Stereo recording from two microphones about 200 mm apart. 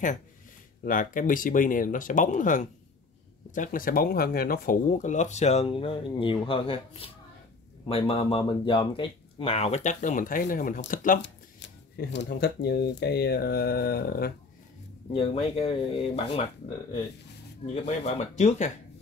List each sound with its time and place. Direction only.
0.8 s speech: 40° left (ahead or behind)
11.1 s speech: 65° left (ahead or behind)
15.1 s speech: 30° left (ahead or behind)
17.8 s speech: 35° left (ahead or behind)